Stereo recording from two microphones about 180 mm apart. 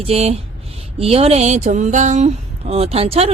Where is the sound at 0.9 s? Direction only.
35° right (ahead or behind).